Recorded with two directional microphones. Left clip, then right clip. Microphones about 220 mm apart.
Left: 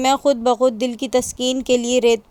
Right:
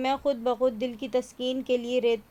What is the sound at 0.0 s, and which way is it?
Speech, 35° left (ahead or behind).